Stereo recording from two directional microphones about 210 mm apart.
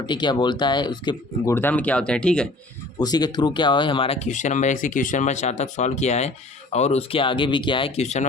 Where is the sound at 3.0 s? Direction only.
20° left (ahead or behind).